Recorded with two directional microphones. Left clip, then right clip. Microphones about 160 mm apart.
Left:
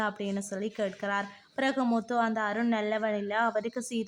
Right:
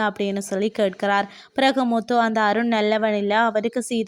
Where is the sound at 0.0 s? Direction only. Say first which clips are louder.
Right 9 dB; 40° right (ahead or behind).